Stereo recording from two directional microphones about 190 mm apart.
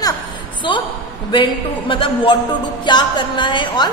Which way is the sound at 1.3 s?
25° left (ahead or behind).